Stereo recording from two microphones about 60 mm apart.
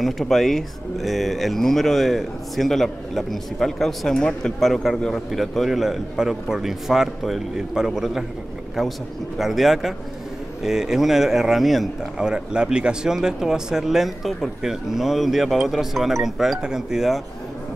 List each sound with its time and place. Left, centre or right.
0.0 s speech: centre
9.4 s speech: centre
12.2 s speech: centre